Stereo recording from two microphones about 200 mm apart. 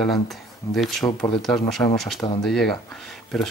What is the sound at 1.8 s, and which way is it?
Speech, 15° left (ahead or behind).